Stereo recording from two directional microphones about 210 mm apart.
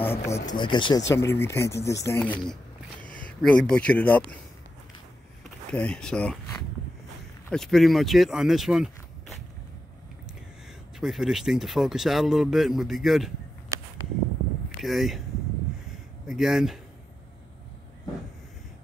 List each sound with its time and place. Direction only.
0.0 s speech: 10° left (ahead or behind)
1.1 s speech: 10° left (ahead or behind)
5.7 s a man's voice: 5° left (ahead or behind)
7.4 s speech: centre (ahead or behind)
11.0 s a man's voice: centre (ahead or behind)
14.8 s a man's voice: centre (ahead or behind)
16.3 s a man's voice: centre (ahead or behind)